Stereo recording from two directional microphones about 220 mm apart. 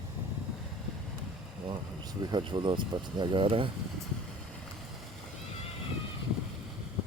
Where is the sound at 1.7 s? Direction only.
20° right (ahead or behind).